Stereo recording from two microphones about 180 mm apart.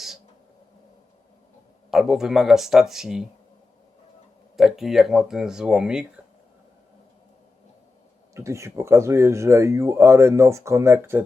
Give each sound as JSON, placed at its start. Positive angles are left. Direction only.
{"t": 1.9, "sound": "speech", "side_deg": 0}
{"t": 4.5, "sound": "speech", "side_deg": 0}
{"t": 8.4, "sound": "speech", "side_deg": -15}